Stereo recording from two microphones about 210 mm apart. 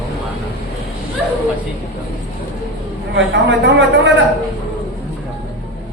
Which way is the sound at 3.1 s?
55° right (ahead or behind).